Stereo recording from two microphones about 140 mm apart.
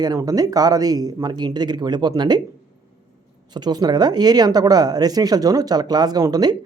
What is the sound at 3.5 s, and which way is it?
Speech, 30° right (ahead or behind).